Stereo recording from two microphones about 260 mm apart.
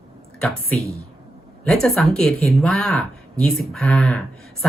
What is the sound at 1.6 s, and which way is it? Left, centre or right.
Speech, centre.